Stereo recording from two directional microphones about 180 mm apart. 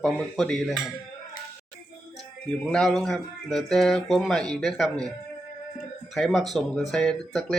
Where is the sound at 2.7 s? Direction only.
Centre (ahead or behind).